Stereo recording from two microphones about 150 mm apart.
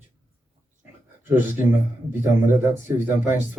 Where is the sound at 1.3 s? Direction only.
15° right (ahead or behind).